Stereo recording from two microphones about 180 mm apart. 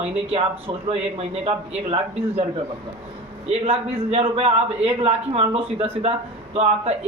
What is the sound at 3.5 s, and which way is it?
A man's voice, 35° right (ahead or behind).